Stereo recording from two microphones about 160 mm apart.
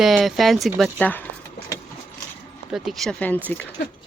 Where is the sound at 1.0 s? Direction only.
10° left (ahead or behind).